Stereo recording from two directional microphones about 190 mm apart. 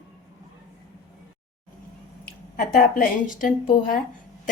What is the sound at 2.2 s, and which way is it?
A woman's voice, 50° left (ahead or behind).